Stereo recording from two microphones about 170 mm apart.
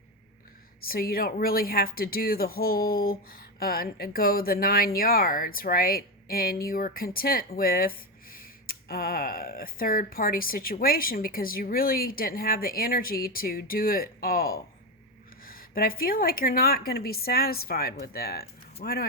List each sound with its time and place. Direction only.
0.9 s a woman's voice: 60° left (ahead or behind)